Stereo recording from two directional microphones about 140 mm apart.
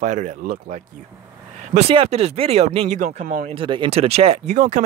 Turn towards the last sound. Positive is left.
turn(degrees=-55)  # may be behind; listen again after turning